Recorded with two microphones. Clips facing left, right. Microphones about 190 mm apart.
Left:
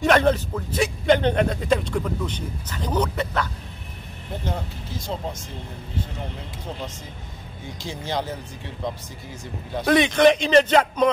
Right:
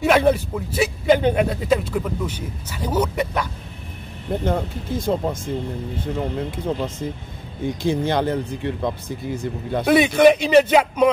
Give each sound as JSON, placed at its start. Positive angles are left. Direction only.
{"t": 0.0, "sound": "speech", "side_deg": -10}
{"t": 4.5, "sound": "speech", "side_deg": -55}
{"t": 9.8, "sound": "speech", "side_deg": -5}